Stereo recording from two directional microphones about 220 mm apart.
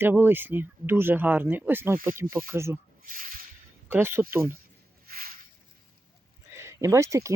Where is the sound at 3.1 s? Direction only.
40° right (ahead or behind).